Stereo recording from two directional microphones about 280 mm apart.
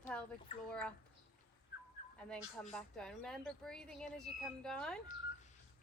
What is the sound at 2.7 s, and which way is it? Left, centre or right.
Speech, centre.